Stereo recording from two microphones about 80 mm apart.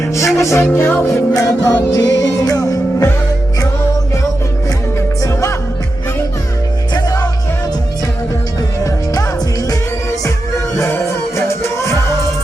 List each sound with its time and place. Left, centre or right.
0.0 s music: left
0.6 s music: left
0.9 s music: left
4.9 s music: left
6.9 s music: left
8.8 s music: left
10.8 s music: left